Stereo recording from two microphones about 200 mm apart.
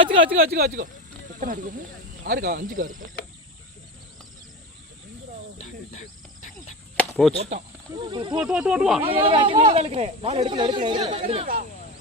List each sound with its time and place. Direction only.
0.0 s speech: 25° right (ahead or behind)
0.5 s speech: 50° right (ahead or behind)
5.5 s cricket: 40° left (ahead or behind)
6.9 s chop: centre (ahead or behind)
7.9 s speech: 25° right (ahead or behind)
8.4 s speech: 5° right (ahead or behind)
9.0 s speech: 25° right (ahead or behind)